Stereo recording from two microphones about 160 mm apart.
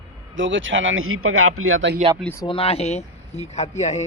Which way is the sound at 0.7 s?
90° right.